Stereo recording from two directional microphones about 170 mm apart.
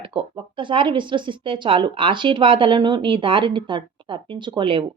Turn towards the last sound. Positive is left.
turn(degrees=-30)  # may be behind; listen again after turning